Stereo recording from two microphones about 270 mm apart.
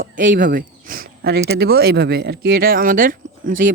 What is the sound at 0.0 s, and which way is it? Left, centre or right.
Speech, right.